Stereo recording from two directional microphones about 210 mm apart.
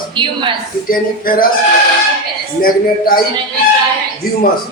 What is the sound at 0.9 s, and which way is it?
Speech, 45° left (ahead or behind).